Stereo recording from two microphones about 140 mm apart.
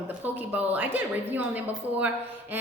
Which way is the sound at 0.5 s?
15° right (ahead or behind).